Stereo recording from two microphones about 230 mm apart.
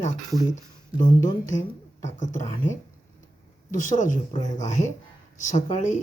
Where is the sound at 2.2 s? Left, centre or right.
Left.